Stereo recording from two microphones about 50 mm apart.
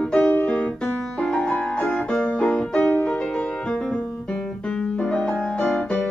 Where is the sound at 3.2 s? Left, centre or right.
Centre.